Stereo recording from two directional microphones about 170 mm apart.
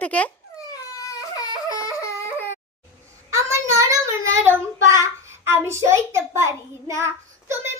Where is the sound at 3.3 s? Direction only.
15° right (ahead or behind).